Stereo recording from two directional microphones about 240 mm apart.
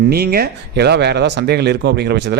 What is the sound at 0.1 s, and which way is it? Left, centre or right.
Speech, right.